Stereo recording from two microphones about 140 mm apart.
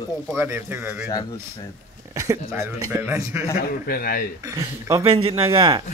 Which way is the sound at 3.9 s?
90° left.